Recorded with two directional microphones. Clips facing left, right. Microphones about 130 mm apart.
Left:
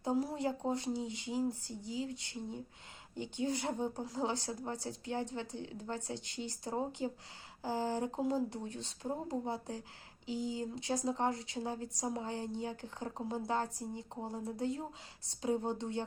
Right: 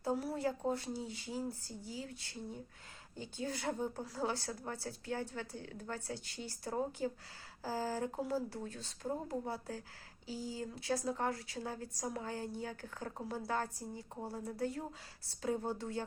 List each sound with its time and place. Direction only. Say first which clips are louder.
0.0 s speech: left 2 dB; 20° left (ahead or behind)